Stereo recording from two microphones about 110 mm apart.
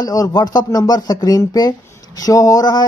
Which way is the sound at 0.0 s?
35° left (ahead or behind).